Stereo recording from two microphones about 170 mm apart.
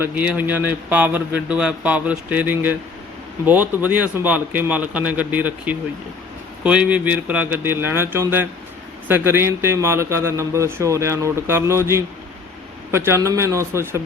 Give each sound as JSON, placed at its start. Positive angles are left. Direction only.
{"t": 0.0, "sound": "a man's voice", "side_deg": -10}